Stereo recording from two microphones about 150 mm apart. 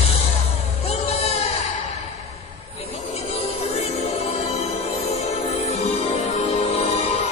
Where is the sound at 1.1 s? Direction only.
45° left (ahead or behind).